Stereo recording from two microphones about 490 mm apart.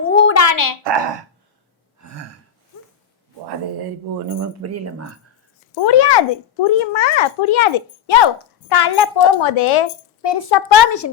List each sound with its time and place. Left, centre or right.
0.1 s a sound: left
0.4 s a sound: left
2.0 s gasp: right
4.3 s speech: right
5.8 s a woman's voice: left
6.7 s a child's voice: left
8.7 s a woman's voice: left
10.2 s a woman's voice: left
10.8 s speech: left